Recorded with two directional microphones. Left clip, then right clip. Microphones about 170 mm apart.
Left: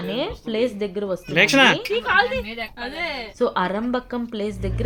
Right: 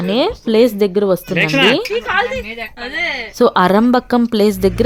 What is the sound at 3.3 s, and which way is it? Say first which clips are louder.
A woman's voice: right 11 dB; 85° right.